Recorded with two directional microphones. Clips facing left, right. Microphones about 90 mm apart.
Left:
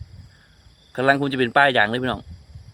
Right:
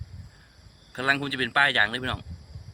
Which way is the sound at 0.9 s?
40° left (ahead or behind).